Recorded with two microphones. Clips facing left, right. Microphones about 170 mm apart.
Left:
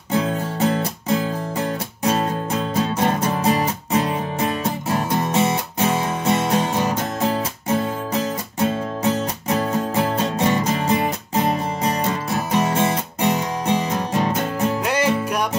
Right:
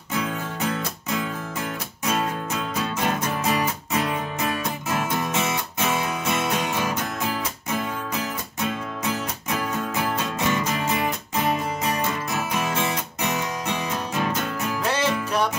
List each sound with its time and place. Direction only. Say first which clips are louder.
0.1 s music: left 6 dB; 35° left (ahead or behind)
14.9 s music: left 4 dB; 10° left (ahead or behind)